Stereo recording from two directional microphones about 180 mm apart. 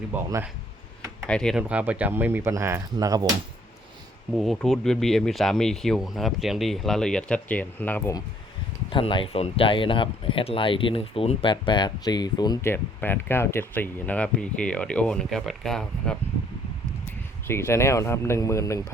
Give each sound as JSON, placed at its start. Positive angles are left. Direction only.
{"t": 1.3, "sound": "speech", "side_deg": 5}
{"t": 1.6, "sound": "speech", "side_deg": -10}
{"t": 4.4, "sound": "speech", "side_deg": 0}
{"t": 8.9, "sound": "speech", "side_deg": 30}
{"t": 12.7, "sound": "speech", "side_deg": 10}
{"t": 17.4, "sound": "speech", "side_deg": 15}